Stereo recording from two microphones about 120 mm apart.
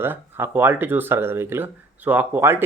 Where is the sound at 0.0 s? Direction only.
20° right (ahead or behind).